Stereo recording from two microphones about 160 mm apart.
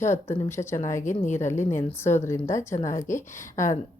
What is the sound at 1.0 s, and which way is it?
Speech, 50° left (ahead or behind).